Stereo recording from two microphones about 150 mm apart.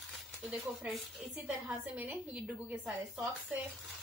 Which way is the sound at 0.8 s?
5° right (ahead or behind).